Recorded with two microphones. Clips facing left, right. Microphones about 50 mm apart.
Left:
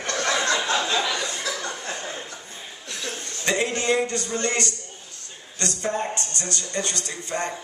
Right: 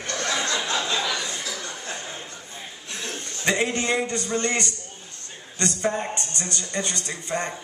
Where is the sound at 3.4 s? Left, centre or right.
Centre.